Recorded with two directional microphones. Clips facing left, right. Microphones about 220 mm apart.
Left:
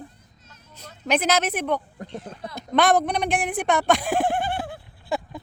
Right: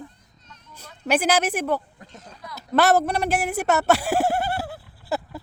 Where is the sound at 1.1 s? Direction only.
10° right (ahead or behind).